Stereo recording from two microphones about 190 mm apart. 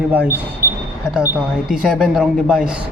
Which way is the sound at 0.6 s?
50° right (ahead or behind).